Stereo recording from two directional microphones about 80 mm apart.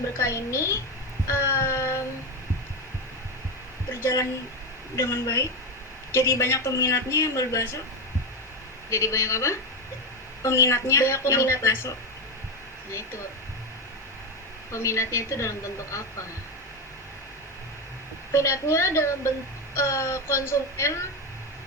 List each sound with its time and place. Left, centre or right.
0.2 s speech: left
1.3 s child singing: left
4.0 s speech: left
8.9 s speech: left
14.7 s speech: left
18.3 s speech: left